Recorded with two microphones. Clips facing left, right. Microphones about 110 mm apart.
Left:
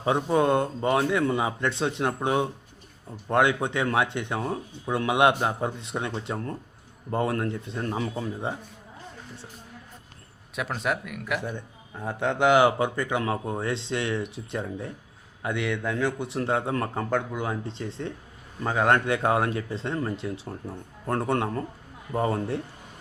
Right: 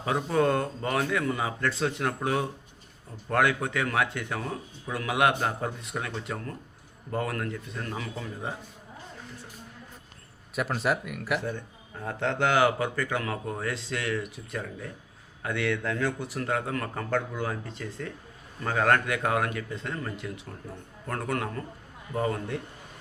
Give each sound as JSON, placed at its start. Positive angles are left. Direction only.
{"t": 0.0, "sound": "speech", "side_deg": 20}
{"t": 10.5, "sound": "speech", "side_deg": 0}
{"t": 12.0, "sound": "speech", "side_deg": 15}